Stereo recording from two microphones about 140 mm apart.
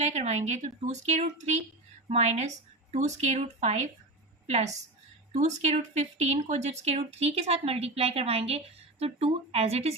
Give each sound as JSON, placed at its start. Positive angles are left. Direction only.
{"t": 0.0, "sound": "a woman's voice", "side_deg": -55}